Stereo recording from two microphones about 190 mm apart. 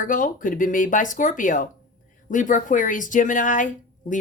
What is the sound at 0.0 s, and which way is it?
Speech, 45° left (ahead or behind).